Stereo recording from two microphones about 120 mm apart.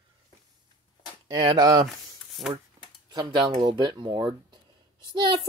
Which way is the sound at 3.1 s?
40° right (ahead or behind).